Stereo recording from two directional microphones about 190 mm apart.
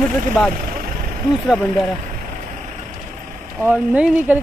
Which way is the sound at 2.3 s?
40° right (ahead or behind).